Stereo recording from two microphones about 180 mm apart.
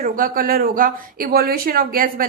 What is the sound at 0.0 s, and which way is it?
Speech, 50° right (ahead or behind).